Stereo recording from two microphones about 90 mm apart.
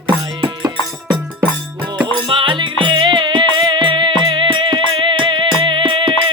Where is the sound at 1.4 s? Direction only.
15° right (ahead or behind).